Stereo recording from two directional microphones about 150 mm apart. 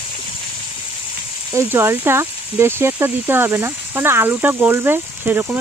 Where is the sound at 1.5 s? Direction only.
15° right (ahead or behind).